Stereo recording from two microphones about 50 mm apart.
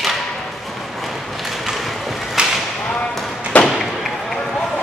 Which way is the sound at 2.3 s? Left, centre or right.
Centre.